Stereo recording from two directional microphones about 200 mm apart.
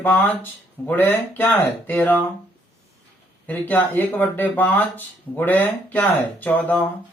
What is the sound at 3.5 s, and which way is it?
Speech, 10° left (ahead or behind).